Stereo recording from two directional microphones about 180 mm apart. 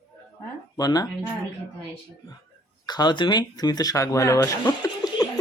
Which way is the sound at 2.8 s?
25° left (ahead or behind).